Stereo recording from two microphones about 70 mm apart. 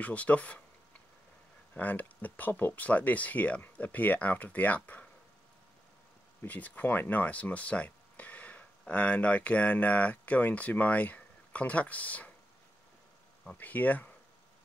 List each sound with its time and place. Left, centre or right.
0.0 s speech: centre
1.8 s speech: left
6.4 s speech: left
13.6 s speech: left